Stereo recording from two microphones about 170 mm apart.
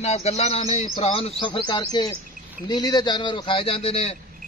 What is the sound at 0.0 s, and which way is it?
A man's voice, 40° left (ahead or behind).